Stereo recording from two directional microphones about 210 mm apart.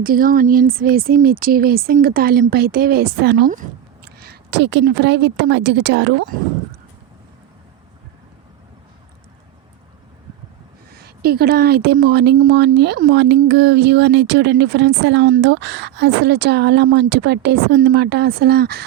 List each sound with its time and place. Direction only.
0.0 s a woman's voice: 45° right (ahead or behind)
10.9 s a woman's voice: 50° right (ahead or behind)